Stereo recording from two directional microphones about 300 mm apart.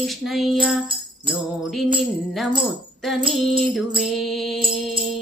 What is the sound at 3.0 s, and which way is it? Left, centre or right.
Speech, centre.